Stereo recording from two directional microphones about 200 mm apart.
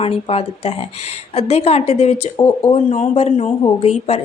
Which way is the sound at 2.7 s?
35° left (ahead or behind).